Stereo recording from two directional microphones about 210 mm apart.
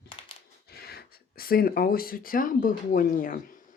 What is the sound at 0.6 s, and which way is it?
Speech, 50° left (ahead or behind).